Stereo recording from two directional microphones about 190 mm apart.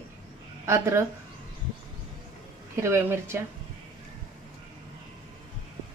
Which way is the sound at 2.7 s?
15° right (ahead or behind).